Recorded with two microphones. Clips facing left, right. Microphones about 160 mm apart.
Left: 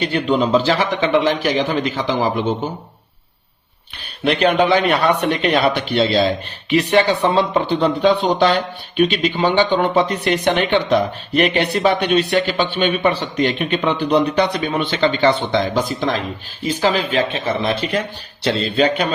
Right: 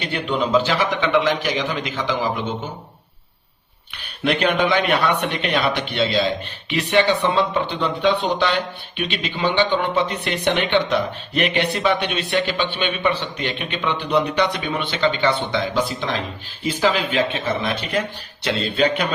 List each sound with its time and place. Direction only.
0.0 s speech: 35° left (ahead or behind)
4.2 s speech: 35° left (ahead or behind)